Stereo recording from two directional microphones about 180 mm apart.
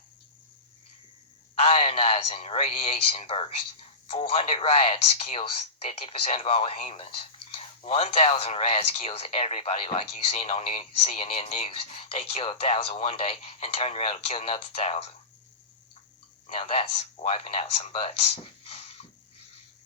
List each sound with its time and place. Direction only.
1.5 s a man's voice: 35° left (ahead or behind)
16.6 s speech: 35° left (ahead or behind)